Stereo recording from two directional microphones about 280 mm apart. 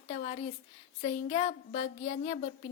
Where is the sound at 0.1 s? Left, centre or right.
Left.